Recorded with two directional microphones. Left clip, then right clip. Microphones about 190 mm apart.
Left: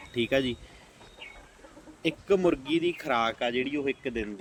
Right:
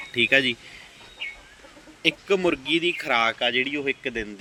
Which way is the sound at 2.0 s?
10° left (ahead or behind).